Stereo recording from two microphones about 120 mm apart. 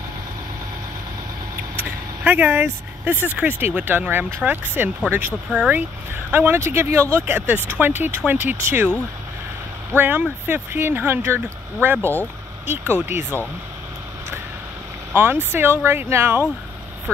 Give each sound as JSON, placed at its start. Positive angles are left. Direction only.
{"t": 1.8, "sound": "speech", "side_deg": -15}
{"t": 9.9, "sound": "speech", "side_deg": -15}
{"t": 12.0, "sound": "speech", "side_deg": 15}
{"t": 12.6, "sound": "speech", "side_deg": -20}
{"t": 15.1, "sound": "speech", "side_deg": -20}